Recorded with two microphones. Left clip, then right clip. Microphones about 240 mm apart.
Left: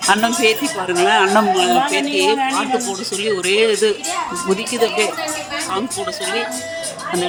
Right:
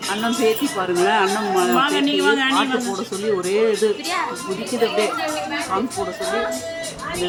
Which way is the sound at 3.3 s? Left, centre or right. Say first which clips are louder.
Left 3 dB; left.